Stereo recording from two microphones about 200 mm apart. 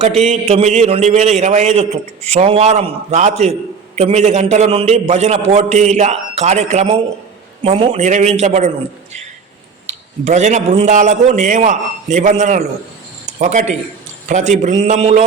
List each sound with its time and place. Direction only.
0.2 s a man's voice: 30° right (ahead or behind)
10.2 s a man's voice: 35° right (ahead or behind)